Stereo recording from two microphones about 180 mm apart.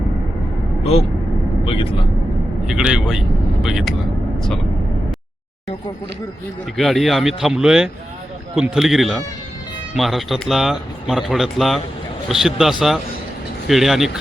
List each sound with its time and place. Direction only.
0.8 s speech: 35° left (ahead or behind)
2.6 s speech: 5° right (ahead or behind)
6.7 s speech: centre (ahead or behind)